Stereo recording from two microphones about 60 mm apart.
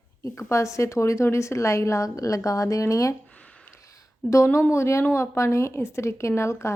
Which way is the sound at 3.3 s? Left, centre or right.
Left.